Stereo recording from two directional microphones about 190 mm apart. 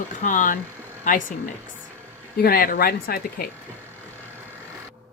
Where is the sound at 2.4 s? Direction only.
50° left (ahead or behind).